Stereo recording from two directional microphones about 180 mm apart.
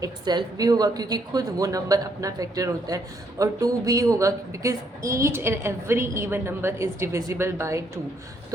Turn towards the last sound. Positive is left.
turn(degrees=-15)  # may be behind; listen again after turning